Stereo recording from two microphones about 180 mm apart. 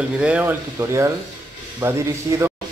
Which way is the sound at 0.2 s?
10° right (ahead or behind).